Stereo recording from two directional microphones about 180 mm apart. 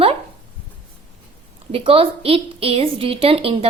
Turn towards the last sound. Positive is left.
turn(degrees=-30)  # may be behind; listen again after turning